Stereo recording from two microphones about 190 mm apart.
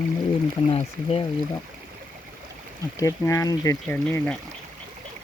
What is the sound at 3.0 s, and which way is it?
Speech, 15° left (ahead or behind).